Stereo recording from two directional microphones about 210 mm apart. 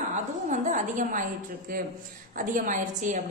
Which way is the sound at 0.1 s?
35° right (ahead or behind).